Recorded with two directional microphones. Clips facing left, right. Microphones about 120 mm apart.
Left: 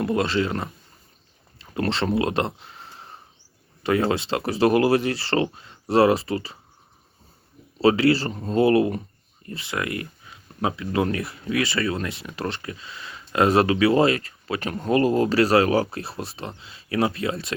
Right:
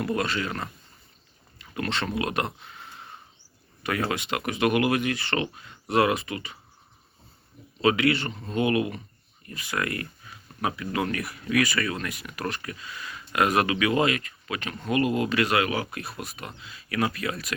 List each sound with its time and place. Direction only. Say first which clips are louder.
0.0 s speech: left 5 dB; 25° left (ahead or behind)
1.5 s a sound: left 5 dB; 30° left (ahead or behind)
3.8 s speech: left 6 dB; 25° left (ahead or behind)
7.8 s speech: left 5 dB; 30° left (ahead or behind)